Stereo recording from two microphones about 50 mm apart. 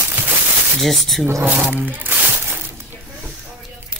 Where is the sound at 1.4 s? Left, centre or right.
Right.